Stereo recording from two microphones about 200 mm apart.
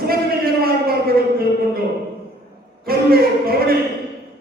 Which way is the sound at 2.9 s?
50° right (ahead or behind).